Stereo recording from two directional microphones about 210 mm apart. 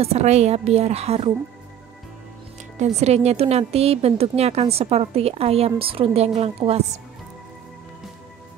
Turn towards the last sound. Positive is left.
turn(degrees=-30)  # may be behind; listen again after turning